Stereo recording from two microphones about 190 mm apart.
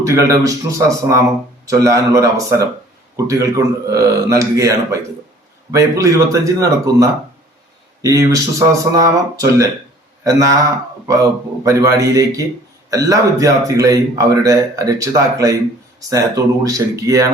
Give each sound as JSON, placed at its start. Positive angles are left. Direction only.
{"t": 0.0, "sound": "speech", "side_deg": -15}